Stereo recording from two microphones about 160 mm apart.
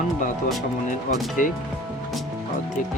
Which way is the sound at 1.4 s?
55° left (ahead or behind).